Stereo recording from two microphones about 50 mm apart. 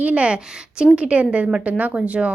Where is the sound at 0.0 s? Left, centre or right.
Right.